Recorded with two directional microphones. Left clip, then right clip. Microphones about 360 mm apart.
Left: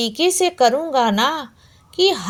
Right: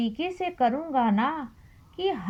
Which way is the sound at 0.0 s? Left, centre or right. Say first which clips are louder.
Left 12 dB; centre.